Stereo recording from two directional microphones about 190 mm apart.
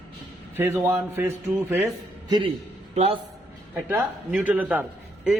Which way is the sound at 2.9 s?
30° right (ahead or behind).